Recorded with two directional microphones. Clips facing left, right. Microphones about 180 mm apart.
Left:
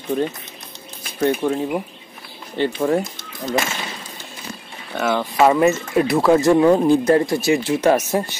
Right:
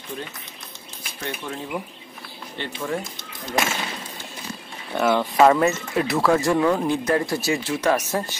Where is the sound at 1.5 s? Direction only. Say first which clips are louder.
Left 8 dB; 30° left (ahead or behind).